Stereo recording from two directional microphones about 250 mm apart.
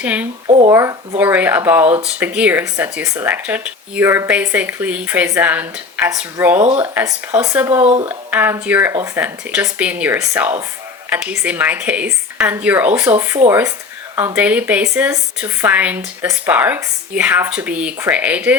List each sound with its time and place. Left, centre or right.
0.0 s speech: centre
0.4 s a sound: right
0.7 s speech: centre